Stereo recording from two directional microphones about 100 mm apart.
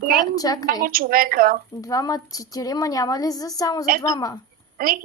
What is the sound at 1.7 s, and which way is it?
Speech, 35° left (ahead or behind).